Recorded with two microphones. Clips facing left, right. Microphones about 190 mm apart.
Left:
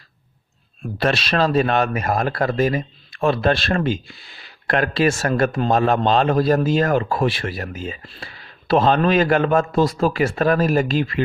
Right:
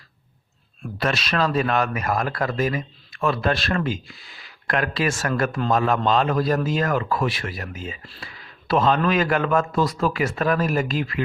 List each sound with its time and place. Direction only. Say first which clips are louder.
0.9 s speech: left 4 dB; 30° left (ahead or behind)